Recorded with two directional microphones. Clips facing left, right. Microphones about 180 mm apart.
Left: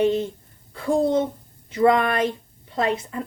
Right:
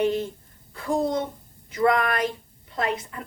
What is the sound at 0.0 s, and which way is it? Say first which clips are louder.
Speech: left 3 dB; 25° left (ahead or behind).